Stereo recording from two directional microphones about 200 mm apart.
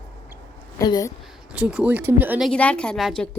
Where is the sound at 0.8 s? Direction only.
15° left (ahead or behind).